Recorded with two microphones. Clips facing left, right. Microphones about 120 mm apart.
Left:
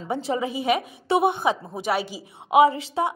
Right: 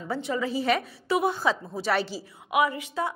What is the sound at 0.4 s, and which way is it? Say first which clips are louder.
A woman's voice: left 2 dB; 15° left (ahead or behind).